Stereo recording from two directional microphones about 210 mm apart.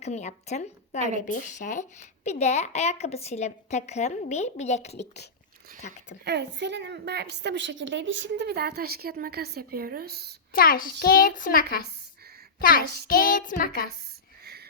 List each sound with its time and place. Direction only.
0.0 s a woman's voice: 35° left (ahead or behind)
4.9 s a child's voice: 50° left (ahead or behind)
6.2 s a woman's voice: 55° right (ahead or behind)
10.6 s a child's voice: 45° left (ahead or behind)
14.4 s wheeze: 50° right (ahead or behind)